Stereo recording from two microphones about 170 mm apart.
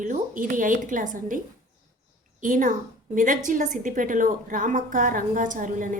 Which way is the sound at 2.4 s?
50° right (ahead or behind).